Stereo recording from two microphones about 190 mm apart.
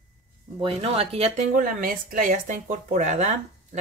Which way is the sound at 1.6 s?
45° right (ahead or behind).